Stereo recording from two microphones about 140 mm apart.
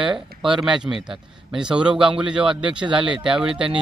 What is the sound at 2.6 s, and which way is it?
Speech, 35° right (ahead or behind).